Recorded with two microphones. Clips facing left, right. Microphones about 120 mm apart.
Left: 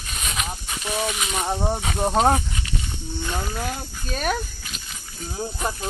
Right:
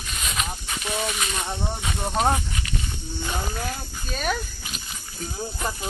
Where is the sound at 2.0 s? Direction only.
30° left (ahead or behind).